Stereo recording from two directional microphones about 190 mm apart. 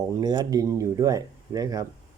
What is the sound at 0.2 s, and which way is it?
Speech, 20° right (ahead or behind).